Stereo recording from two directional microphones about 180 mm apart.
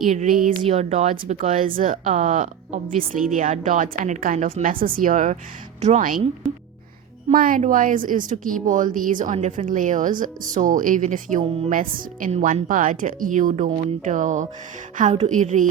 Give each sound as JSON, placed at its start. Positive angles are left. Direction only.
{"t": 0.1, "sound": "speech", "side_deg": -45}
{"t": 7.3, "sound": "speech", "side_deg": -50}